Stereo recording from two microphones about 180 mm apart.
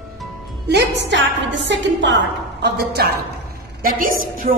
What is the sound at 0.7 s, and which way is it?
A woman's voice, 75° right (ahead or behind).